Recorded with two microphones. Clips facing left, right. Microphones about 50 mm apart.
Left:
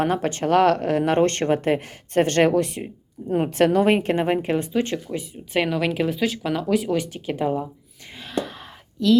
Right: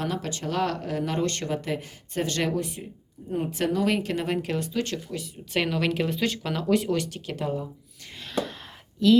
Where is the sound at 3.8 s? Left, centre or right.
Left.